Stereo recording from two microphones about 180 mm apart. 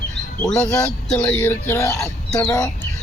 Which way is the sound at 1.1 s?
5° left (ahead or behind).